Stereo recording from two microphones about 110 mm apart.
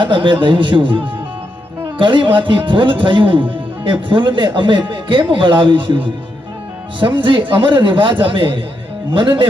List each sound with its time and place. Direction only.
0.0 s speech: 45° right (ahead or behind)